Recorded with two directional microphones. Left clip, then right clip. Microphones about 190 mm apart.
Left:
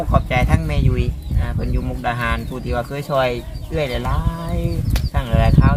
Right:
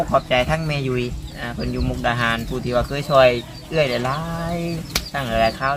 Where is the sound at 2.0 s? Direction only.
25° left (ahead or behind).